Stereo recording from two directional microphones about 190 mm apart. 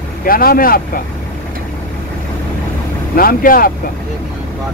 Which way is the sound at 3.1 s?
50° left (ahead or behind).